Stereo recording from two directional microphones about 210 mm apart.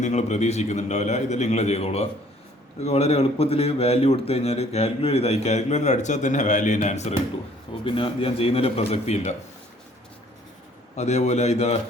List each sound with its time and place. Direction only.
0.0 s speech: 35° left (ahead or behind)
10.9 s speech: 30° left (ahead or behind)